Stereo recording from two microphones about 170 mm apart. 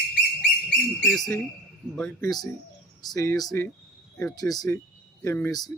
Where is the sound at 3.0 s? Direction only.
20° left (ahead or behind).